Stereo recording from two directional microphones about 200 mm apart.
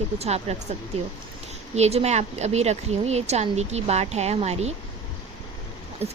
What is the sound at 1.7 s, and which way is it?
Speech, 35° right (ahead or behind).